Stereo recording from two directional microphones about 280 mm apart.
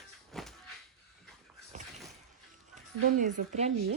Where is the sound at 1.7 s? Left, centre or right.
Right.